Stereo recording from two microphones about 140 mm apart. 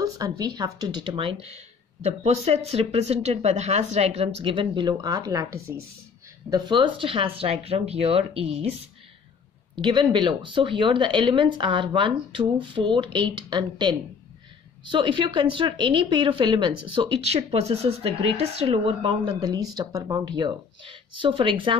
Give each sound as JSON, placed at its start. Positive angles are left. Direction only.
{"t": 0.0, "sound": "a sound", "side_deg": -25}
{"t": 0.6, "sound": "speech", "side_deg": -30}
{"t": 9.8, "sound": "speech", "side_deg": -35}